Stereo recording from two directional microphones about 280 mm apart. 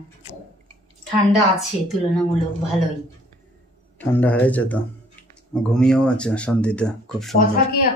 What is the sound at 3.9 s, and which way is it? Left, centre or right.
Speech, centre.